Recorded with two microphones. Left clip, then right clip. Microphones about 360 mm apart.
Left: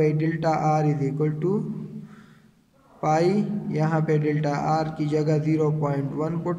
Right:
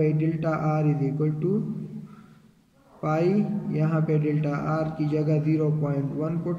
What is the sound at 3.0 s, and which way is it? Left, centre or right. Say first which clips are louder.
A man's voice: left 3 dB; centre.